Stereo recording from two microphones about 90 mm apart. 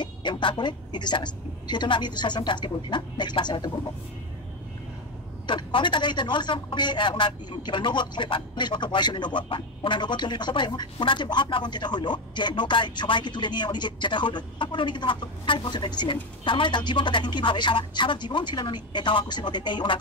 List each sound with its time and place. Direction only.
0.0 s speech: 60° left (ahead or behind)
5.5 s a man's voice: 65° left (ahead or behind)